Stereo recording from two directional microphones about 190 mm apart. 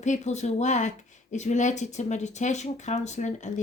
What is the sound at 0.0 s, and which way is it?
A woman's voice, 40° left (ahead or behind).